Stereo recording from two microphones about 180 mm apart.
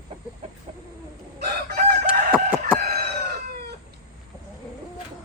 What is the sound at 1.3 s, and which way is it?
Chicken, 60° right (ahead or behind).